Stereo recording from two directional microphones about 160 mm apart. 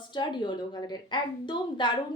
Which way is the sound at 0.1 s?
30° left (ahead or behind).